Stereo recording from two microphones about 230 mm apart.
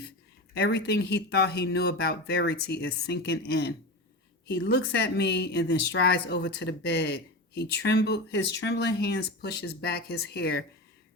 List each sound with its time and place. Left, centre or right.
0.5 s speech: left